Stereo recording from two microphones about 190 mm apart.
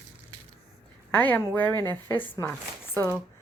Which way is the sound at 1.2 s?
10° left (ahead or behind).